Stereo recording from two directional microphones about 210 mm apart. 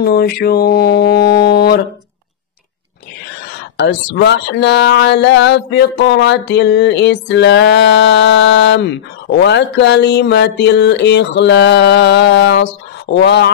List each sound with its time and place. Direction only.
0.0 s mantra: 50° left (ahead or behind)
3.7 s speech: 55° left (ahead or behind)
13.1 s mantra: 55° left (ahead or behind)